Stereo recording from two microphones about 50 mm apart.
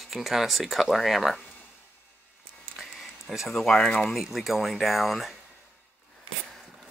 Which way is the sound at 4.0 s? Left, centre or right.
Centre.